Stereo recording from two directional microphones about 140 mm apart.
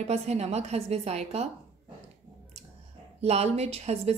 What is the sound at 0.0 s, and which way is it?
A woman's voice, 50° right (ahead or behind).